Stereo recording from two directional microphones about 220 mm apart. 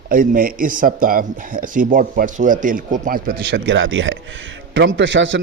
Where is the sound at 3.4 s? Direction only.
55° right (ahead or behind).